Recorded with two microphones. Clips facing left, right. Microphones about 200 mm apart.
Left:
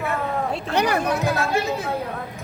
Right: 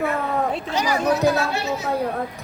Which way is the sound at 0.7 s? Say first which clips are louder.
Left 1 dB; 60° left (ahead or behind).